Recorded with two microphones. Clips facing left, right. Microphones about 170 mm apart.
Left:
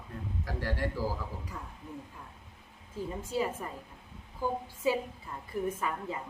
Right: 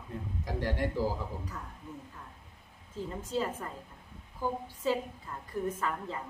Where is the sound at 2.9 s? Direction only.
10° left (ahead or behind).